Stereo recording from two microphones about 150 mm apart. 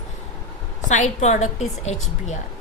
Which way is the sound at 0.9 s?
55° left (ahead or behind).